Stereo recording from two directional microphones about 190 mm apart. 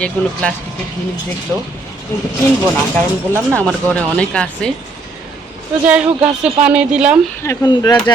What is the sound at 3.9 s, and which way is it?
Speech, 5° left (ahead or behind).